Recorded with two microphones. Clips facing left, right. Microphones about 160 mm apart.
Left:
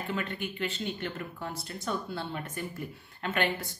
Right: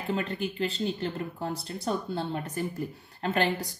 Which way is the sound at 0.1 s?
35° right (ahead or behind).